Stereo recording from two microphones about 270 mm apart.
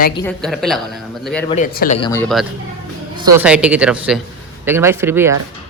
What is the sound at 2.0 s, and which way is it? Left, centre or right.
Speech, centre.